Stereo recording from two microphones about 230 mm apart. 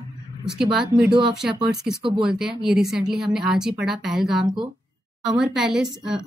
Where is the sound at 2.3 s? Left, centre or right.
Centre.